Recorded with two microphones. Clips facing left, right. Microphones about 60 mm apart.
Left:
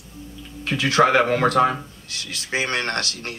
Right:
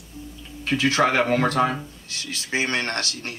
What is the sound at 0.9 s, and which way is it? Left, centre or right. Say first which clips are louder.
Speech: left 5 dB; left.